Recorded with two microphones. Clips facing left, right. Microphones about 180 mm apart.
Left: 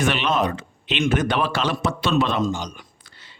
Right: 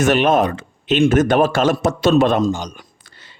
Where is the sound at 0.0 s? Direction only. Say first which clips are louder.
Right 7 dB; 45° right (ahead or behind).